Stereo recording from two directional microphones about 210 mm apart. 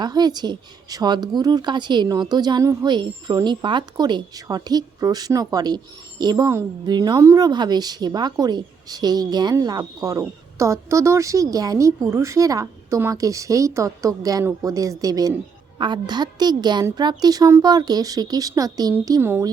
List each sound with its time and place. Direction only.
0.0 s a woman's voice: 20° right (ahead or behind)